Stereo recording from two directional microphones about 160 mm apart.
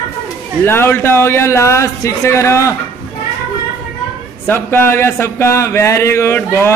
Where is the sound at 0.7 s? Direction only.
15° left (ahead or behind).